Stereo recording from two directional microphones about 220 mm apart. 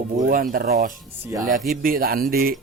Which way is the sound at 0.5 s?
40° right (ahead or behind).